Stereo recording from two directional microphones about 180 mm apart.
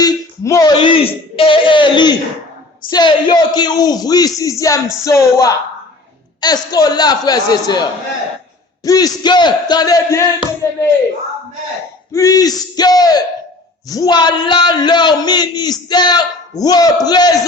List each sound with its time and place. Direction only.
0.0 s a sound: 20° left (ahead or behind)
4.4 s speech: 20° left (ahead or behind)
12.1 s speech: 20° left (ahead or behind)